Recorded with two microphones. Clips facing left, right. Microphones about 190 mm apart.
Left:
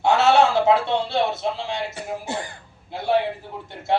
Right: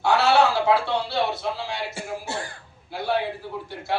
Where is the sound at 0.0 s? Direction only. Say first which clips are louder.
Left 2 dB; 20° left (ahead or behind).